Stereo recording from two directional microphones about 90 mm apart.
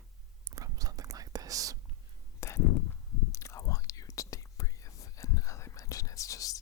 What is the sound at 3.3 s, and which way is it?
Whispering, 35° left (ahead or behind).